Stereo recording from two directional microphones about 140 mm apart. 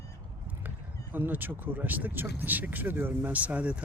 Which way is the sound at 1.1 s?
15° right (ahead or behind).